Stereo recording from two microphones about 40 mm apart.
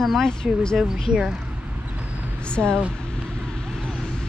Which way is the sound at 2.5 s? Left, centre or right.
Left.